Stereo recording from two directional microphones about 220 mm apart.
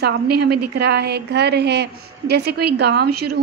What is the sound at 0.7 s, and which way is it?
A woman's voice, 50° right (ahead or behind).